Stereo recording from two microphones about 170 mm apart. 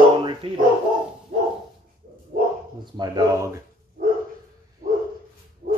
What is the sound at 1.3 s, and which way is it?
Dog, 50° right (ahead or behind).